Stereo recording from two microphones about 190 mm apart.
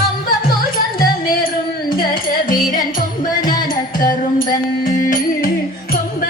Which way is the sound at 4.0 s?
45° left (ahead or behind).